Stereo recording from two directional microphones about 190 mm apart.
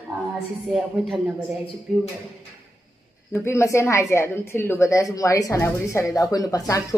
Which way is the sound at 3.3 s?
15° left (ahead or behind).